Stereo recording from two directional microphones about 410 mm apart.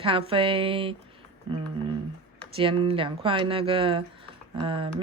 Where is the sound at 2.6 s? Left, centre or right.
Centre.